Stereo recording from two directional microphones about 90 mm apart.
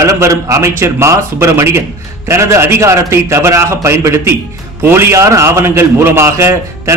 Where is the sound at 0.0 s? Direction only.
35° right (ahead or behind).